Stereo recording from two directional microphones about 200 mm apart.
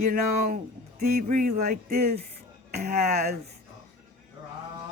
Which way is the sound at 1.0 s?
45° right (ahead or behind).